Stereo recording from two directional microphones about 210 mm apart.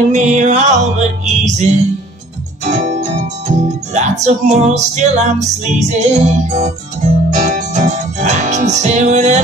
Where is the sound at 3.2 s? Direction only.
35° right (ahead or behind).